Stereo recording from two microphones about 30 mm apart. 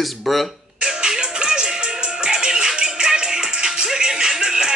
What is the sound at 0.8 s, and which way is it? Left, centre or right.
Music, centre.